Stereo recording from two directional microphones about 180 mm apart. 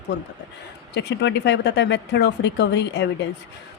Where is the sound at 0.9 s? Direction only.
70° left (ahead or behind).